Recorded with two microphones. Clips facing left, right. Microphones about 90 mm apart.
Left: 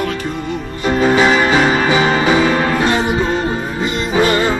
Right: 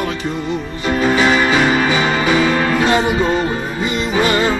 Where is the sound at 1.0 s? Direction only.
25° left (ahead or behind).